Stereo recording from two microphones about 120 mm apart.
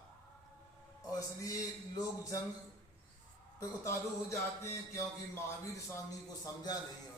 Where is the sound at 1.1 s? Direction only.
30° left (ahead or behind).